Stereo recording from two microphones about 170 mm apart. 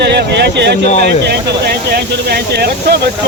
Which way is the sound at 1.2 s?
70° right (ahead or behind).